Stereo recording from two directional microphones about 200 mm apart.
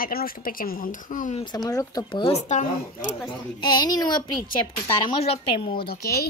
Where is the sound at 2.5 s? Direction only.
40° left (ahead or behind).